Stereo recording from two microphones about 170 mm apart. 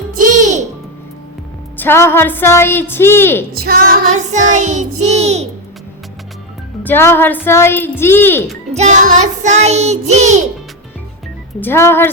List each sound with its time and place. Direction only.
0.2 s music: 50° right (ahead or behind)
1.7 s a woman's voice: 10° left (ahead or behind)
3.6 s female singing: 60° right (ahead or behind)
4.1 s music: 45° right (ahead or behind)
6.8 s a woman's voice: 15° left (ahead or behind)
8.7 s music: 45° right (ahead or behind)
11.6 s a woman's voice: 15° left (ahead or behind)